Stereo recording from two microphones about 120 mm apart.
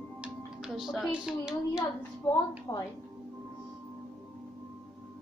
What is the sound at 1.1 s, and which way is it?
Speech, 5° right (ahead or behind).